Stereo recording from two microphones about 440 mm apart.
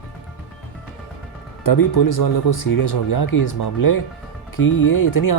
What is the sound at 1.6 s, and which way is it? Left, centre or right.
Speech, left.